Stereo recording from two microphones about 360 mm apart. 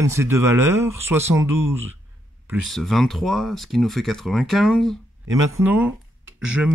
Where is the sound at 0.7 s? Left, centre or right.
Right.